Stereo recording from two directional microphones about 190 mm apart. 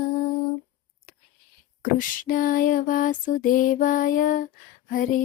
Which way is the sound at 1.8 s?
45° left (ahead or behind).